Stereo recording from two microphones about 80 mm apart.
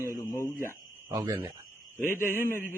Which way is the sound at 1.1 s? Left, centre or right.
Right.